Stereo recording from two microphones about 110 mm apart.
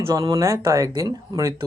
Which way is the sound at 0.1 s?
30° right (ahead or behind).